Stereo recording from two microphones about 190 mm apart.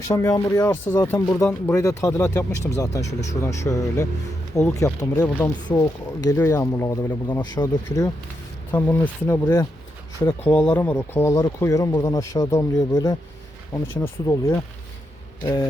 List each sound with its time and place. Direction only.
0.1 s speech: 15° left (ahead or behind)